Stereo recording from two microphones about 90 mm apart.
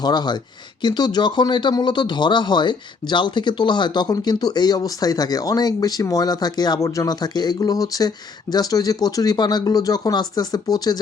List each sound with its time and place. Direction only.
0.0 s speech: 50° left (ahead or behind)